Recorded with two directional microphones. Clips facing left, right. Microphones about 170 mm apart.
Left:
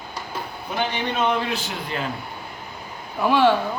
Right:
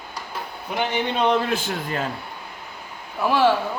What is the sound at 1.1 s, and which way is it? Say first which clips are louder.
Speech: right 2 dB; 30° right (ahead or behind).